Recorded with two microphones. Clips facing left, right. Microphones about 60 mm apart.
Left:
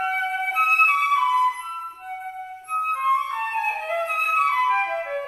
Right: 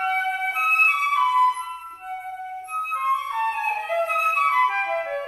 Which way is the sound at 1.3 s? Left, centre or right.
Right.